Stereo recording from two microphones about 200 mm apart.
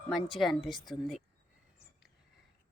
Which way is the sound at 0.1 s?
Centre (ahead or behind).